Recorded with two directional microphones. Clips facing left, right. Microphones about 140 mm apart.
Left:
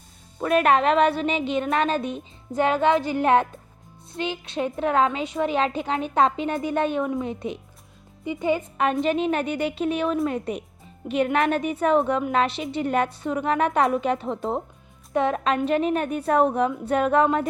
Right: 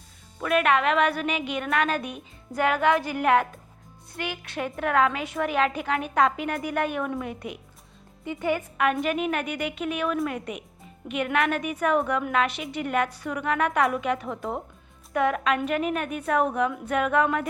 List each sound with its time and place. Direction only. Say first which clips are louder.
0.3 s a woman's voice: left 3 dB; 35° left (ahead or behind)